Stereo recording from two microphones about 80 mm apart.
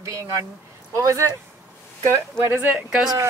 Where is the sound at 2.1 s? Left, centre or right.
Right.